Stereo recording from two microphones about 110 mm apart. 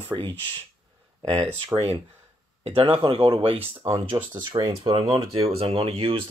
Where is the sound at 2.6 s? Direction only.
55° right (ahead or behind).